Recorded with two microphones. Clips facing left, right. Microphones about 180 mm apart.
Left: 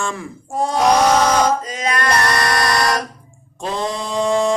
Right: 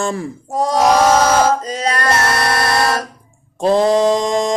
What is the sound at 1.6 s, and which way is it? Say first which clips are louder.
Music: right 2 dB; 40° right (ahead or behind).